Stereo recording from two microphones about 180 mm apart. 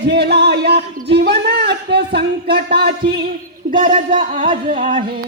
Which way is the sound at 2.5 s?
65° right (ahead or behind).